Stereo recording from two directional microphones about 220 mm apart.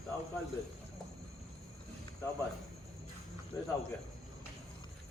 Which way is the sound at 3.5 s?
15° left (ahead or behind).